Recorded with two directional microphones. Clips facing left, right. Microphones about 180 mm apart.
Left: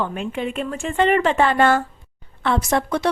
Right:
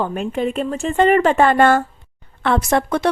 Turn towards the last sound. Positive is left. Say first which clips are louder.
# right 3 dB
turn(degrees=-55)  # may be behind; listen again after turning